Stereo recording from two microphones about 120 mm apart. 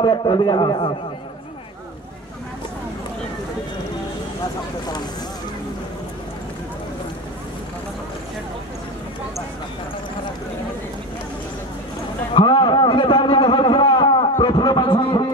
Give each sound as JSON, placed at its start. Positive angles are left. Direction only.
{"t": 0.0, "sound": "a man's voice", "side_deg": 45}
{"t": 12.4, "sound": "a man's voice", "side_deg": 40}
{"t": 14.4, "sound": "a sound", "side_deg": 40}